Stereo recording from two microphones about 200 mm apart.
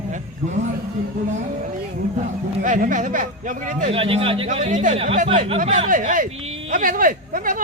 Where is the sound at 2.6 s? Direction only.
40° right (ahead or behind).